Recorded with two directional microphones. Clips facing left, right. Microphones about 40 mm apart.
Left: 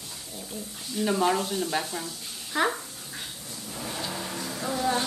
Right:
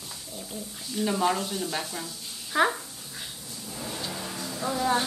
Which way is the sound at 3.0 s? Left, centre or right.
Left.